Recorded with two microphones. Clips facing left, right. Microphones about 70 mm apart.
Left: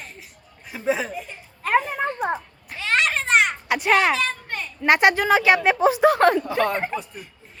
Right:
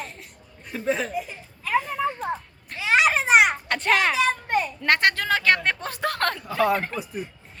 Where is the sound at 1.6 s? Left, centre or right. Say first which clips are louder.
Left 3 dB; left.